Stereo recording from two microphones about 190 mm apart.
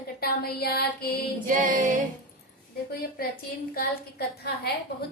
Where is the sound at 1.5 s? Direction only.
45° right (ahead or behind).